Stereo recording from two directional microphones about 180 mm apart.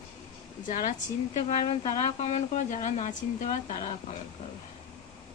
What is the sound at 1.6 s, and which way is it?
Speech, 25° left (ahead or behind).